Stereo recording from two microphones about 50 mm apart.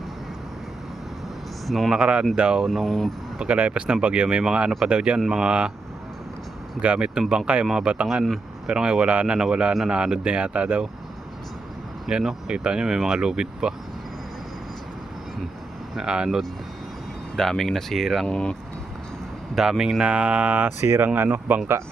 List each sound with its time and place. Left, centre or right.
1.6 s speech: centre
1.9 s speech: centre
2.6 s speech: centre
3.3 s speech: right
6.8 s speech: centre
12.0 s speech: centre
16.0 s speech: centre
17.3 s speech: centre
18.3 s speech: centre
19.5 s speech: centre
20.0 s speech: right
20.8 s speech: right
21.2 s speech: right